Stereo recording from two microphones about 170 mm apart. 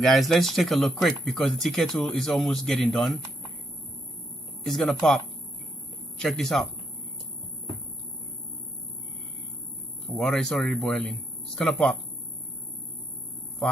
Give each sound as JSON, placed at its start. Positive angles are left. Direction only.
{"t": 0.0, "sound": "speech", "side_deg": 0}
{"t": 4.6, "sound": "speech", "side_deg": 0}
{"t": 10.1, "sound": "speech", "side_deg": 0}